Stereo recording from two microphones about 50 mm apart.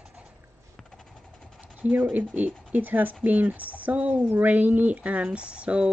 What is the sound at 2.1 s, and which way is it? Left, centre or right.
Speech, right.